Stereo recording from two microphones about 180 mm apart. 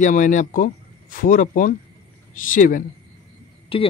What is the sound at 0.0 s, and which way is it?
Speech, 45° left (ahead or behind).